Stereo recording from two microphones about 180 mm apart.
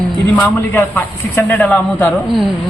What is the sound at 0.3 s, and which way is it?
A man's voice, 10° left (ahead or behind).